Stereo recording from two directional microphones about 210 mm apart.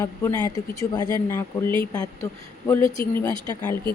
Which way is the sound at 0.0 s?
10° left (ahead or behind).